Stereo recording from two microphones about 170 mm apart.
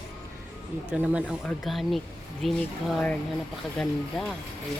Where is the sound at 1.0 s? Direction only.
10° right (ahead or behind).